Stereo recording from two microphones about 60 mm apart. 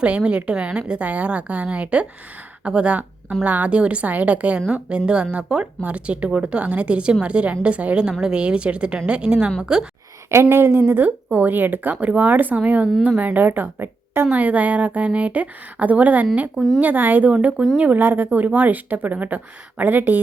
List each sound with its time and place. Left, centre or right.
0.0 s a woman's voice: centre
10.5 s speech: right
14.3 s a woman's voice: right
16.6 s speech: centre
16.8 s a woman's voice: right